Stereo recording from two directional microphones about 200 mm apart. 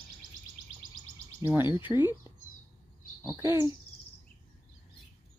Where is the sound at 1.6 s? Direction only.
25° left (ahead or behind).